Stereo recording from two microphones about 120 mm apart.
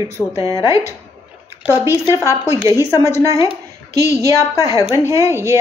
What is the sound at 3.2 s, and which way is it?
Speech, 25° right (ahead or behind).